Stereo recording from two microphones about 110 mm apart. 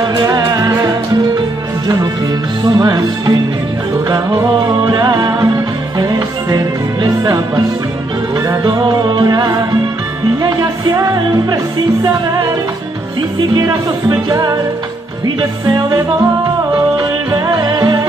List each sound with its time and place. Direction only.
0.3 s music: 35° right (ahead or behind)
2.6 s music: 35° right (ahead or behind)
13.6 s music: 30° right (ahead or behind)
15.6 s music: 35° right (ahead or behind)
17.3 s music: 35° right (ahead or behind)